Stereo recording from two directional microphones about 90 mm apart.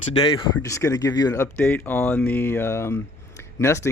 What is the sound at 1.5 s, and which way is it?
Speech, 15° left (ahead or behind).